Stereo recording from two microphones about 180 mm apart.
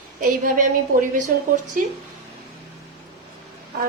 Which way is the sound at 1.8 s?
50° right (ahead or behind).